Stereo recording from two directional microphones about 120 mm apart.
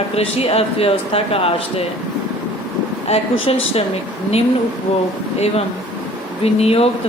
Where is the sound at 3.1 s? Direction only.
55° left (ahead or behind).